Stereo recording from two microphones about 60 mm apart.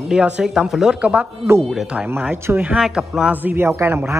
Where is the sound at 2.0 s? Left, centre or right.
Right.